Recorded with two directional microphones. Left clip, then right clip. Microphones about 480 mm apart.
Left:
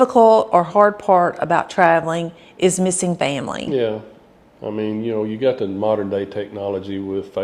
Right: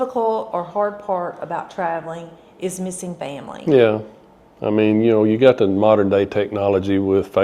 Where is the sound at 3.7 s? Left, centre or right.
Right.